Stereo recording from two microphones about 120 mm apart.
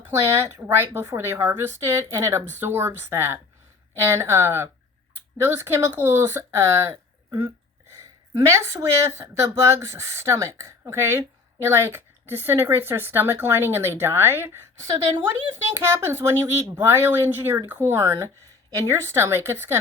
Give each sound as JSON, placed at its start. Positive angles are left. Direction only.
{"t": 0.0, "sound": "speech", "side_deg": -20}